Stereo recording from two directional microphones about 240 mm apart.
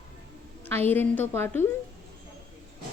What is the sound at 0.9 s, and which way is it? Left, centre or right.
Speech, centre.